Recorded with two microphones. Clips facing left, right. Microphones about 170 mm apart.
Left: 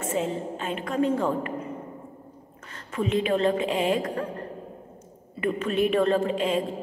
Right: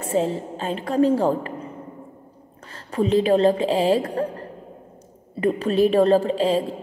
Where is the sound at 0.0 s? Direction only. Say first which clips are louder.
Right 5 dB; 35° right (ahead or behind).